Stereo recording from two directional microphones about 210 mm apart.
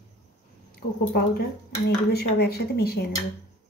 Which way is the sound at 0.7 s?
50° left (ahead or behind).